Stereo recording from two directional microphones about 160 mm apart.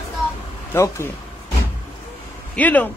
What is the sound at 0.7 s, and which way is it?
Speech, 15° left (ahead or behind).